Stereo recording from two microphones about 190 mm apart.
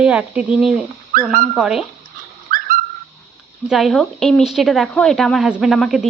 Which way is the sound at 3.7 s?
Centre (ahead or behind).